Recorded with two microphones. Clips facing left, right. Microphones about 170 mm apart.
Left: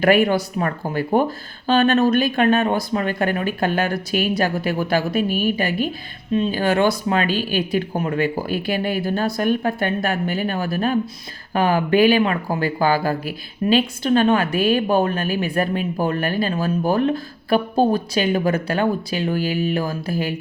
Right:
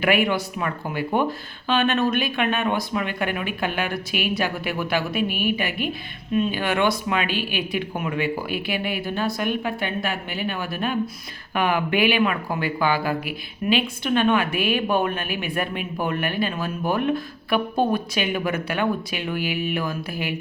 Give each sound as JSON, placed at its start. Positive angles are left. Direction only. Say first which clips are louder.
{"t": 0.0, "sound": "speech", "louder": "left 5 dB", "side_deg": 40}